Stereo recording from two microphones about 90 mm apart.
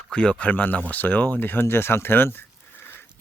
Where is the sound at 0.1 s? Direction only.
15° left (ahead or behind).